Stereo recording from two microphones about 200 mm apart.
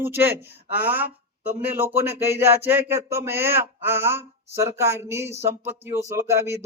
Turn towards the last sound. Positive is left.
turn(degrees=-15)  # may be behind; listen again after turning